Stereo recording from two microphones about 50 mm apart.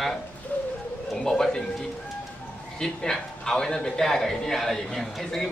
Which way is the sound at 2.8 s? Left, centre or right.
Centre.